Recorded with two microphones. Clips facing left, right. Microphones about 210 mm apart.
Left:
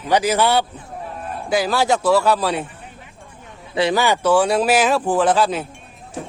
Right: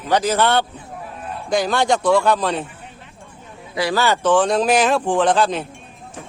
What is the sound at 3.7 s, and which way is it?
Speech, 25° left (ahead or behind).